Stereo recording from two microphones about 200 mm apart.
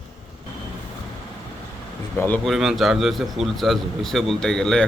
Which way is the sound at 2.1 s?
10° left (ahead or behind).